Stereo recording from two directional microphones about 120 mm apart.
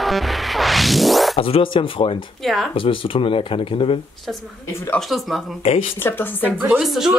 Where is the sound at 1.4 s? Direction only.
50° left (ahead or behind).